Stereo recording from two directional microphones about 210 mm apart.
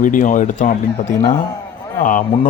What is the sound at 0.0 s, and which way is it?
Speech, 40° left (ahead or behind).